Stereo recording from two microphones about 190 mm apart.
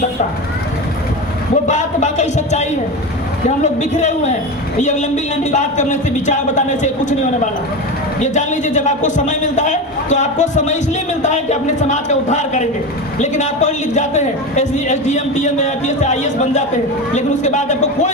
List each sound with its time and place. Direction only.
1.6 s a man's voice: 40° left (ahead or behind)
8.2 s a man's voice: 40° left (ahead or behind)